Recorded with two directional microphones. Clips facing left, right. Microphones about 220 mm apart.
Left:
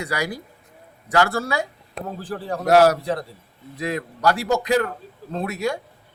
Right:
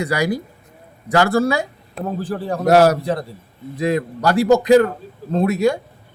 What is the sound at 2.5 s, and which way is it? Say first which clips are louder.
Speech: right 2 dB; 45° right (ahead or behind).